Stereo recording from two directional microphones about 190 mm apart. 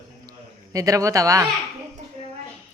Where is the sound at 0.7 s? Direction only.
15° right (ahead or behind).